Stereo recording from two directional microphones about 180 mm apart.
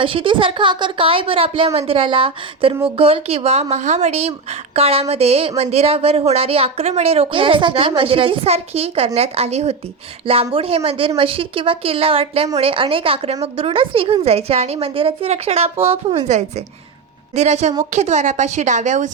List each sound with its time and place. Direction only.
0.0 s a woman's voice: 30° right (ahead or behind)